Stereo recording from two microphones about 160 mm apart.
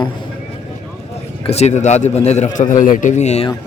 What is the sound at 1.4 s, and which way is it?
A man's voice, 40° left (ahead or behind).